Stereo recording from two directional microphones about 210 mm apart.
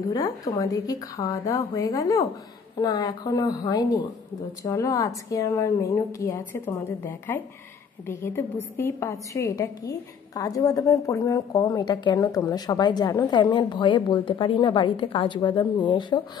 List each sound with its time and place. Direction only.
0.1 s a woman's voice: 15° left (ahead or behind)